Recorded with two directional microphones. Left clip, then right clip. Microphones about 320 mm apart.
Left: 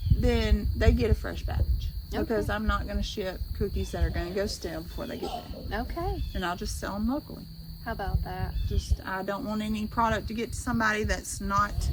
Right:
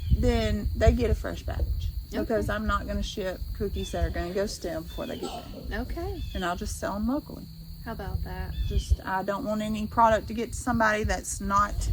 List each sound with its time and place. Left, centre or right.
0.2 s speech: centre
5.7 s speech: centre
6.3 s speech: centre
7.9 s speech: centre
9.0 s speech: centre